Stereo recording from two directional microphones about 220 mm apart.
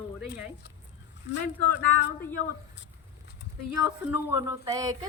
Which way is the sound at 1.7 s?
55° left (ahead or behind).